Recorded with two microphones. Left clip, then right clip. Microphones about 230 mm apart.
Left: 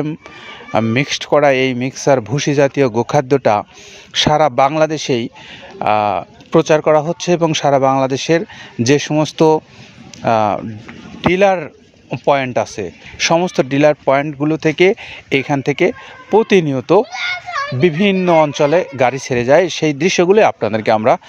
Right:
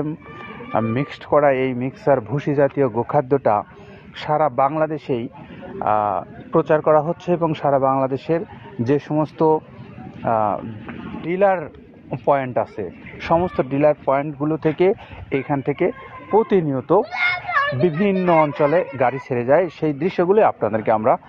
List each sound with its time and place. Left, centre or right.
0.7 s speech: left
7.3 s speech: left